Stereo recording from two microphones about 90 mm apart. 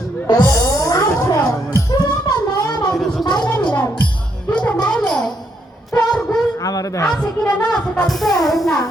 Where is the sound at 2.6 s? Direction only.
50° left (ahead or behind).